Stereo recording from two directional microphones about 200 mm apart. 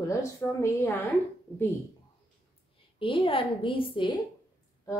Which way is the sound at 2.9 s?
25° left (ahead or behind).